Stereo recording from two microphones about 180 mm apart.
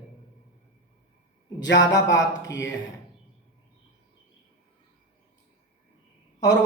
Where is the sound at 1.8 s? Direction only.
20° left (ahead or behind).